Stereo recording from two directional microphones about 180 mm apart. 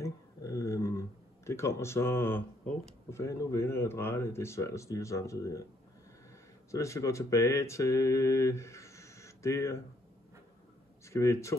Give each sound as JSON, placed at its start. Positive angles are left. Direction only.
{"t": 0.0, "sound": "speech", "side_deg": 15}
{"t": 6.7, "sound": "speech", "side_deg": 15}
{"t": 11.1, "sound": "speech", "side_deg": 15}